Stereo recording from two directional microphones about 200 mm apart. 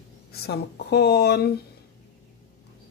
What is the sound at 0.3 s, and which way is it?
Speech, 55° left (ahead or behind).